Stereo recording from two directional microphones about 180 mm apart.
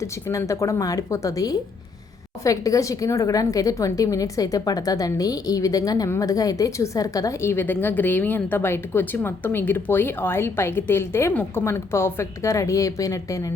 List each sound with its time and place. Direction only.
0.0 s speech: 15° left (ahead or behind)